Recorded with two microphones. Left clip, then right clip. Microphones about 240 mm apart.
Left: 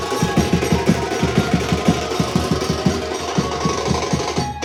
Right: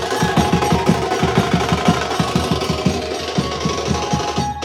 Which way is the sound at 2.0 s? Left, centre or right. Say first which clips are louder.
Right 2 dB; centre.